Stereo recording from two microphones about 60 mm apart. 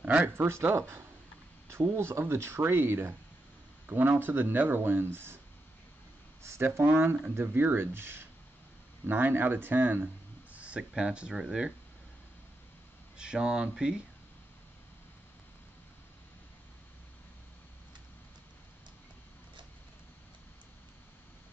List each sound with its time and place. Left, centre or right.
0.0 s speech: right
0.4 s speech: right
3.8 s speech: right
6.4 s speech: right
10.5 s a sound: right
10.8 s speech: centre
13.2 s speech: centre